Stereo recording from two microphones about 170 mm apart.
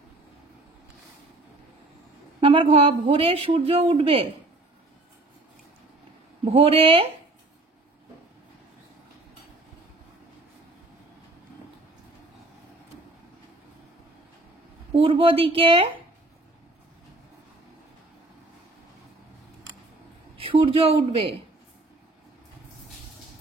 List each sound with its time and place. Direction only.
2.4 s speech: 30° right (ahead or behind)
6.4 s speech: 35° right (ahead or behind)
15.0 s speech: 30° right (ahead or behind)
20.3 s speech: 35° right (ahead or behind)